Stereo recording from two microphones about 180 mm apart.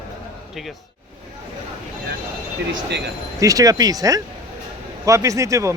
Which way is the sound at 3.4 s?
20° right (ahead or behind).